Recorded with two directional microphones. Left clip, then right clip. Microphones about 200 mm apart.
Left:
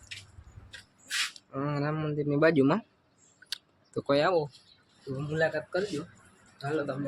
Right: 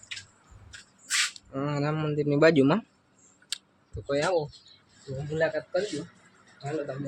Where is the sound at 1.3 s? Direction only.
Centre (ahead or behind).